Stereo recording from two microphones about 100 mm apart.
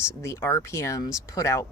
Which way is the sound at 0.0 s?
25° left (ahead or behind).